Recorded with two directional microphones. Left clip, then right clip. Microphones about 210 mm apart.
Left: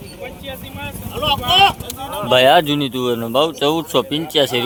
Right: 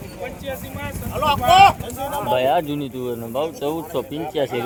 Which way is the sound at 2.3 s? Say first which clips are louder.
Left 9 dB; 15° left (ahead or behind).